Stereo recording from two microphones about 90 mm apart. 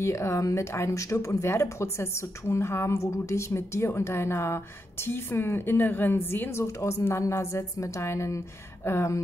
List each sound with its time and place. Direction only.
0.0 s speech: 30° left (ahead or behind)